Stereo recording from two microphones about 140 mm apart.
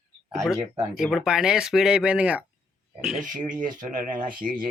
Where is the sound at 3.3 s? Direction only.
65° right (ahead or behind).